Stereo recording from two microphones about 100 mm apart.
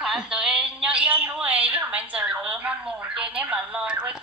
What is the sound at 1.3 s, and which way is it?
A woman's voice, 15° right (ahead or behind).